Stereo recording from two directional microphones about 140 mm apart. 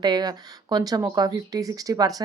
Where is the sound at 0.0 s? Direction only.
30° right (ahead or behind).